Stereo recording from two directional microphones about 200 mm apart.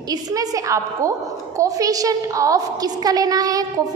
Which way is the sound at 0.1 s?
15° right (ahead or behind).